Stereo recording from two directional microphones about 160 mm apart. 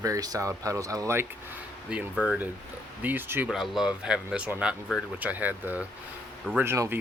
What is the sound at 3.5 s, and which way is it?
Speech, centre (ahead or behind).